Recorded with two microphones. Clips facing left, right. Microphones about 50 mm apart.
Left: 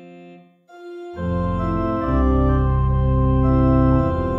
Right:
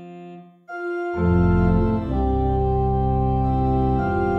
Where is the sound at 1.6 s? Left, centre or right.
Left.